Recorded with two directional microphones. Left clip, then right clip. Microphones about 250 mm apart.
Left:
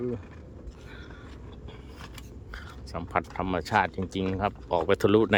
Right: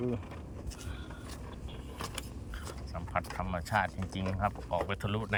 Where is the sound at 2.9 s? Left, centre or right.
Left.